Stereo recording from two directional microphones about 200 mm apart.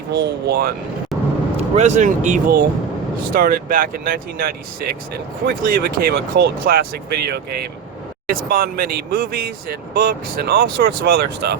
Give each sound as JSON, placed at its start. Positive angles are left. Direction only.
{"t": 0.1, "sound": "speech", "side_deg": -55}
{"t": 1.1, "sound": "vehicle", "side_deg": 0}
{"t": 1.7, "sound": "speech", "side_deg": -35}